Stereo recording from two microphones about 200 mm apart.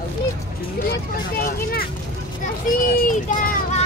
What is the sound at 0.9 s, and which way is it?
Speech, 50° left (ahead or behind).